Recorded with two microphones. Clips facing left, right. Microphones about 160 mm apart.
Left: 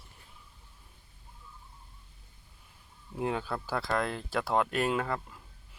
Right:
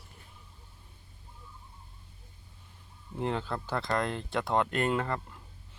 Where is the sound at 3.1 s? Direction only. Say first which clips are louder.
Even; 5° left (ahead or behind).